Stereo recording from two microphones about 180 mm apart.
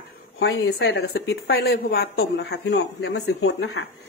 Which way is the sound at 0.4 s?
70° left (ahead or behind).